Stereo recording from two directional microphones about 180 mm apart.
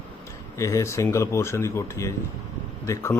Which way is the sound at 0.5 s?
15° left (ahead or behind).